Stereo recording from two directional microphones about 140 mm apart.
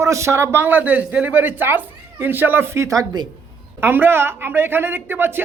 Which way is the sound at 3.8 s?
15° right (ahead or behind).